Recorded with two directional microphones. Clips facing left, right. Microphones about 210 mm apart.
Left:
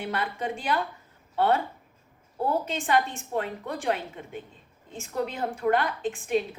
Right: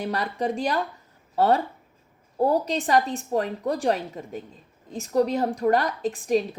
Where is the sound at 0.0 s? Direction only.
35° right (ahead or behind).